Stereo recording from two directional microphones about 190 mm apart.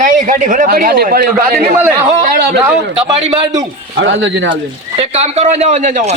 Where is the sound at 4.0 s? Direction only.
75° right (ahead or behind).